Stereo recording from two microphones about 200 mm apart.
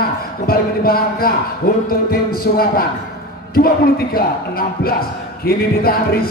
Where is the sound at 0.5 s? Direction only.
50° left (ahead or behind).